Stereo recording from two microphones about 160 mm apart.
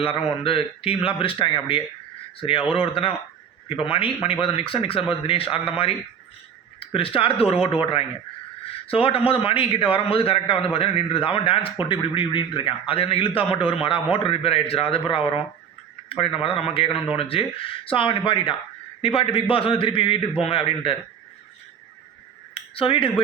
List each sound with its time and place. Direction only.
0.0 s a man's voice: 35° left (ahead or behind)
22.5 s speech: 35° left (ahead or behind)